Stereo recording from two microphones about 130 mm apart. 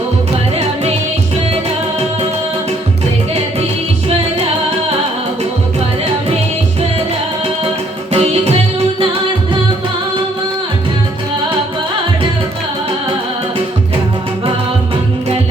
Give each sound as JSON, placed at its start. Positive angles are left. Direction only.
{"t": 8.1, "sound": "music", "side_deg": -50}